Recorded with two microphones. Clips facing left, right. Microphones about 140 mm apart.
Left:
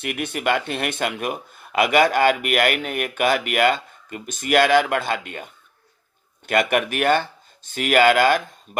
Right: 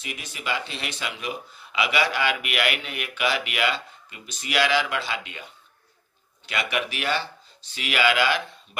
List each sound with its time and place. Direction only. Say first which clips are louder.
0.0 s speech: left 10 dB; 60° left (ahead or behind)